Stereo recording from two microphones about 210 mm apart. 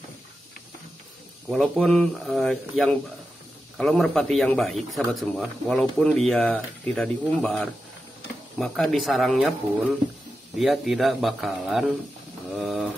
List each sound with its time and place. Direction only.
1.5 s speech: centre (ahead or behind)